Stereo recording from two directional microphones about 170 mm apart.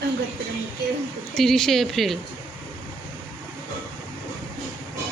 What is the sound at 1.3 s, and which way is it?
Speech, centre (ahead or behind).